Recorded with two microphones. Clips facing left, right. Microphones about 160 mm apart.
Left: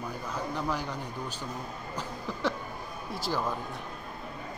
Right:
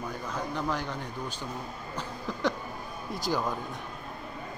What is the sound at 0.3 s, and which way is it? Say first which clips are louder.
Speech: even; 5° left (ahead or behind).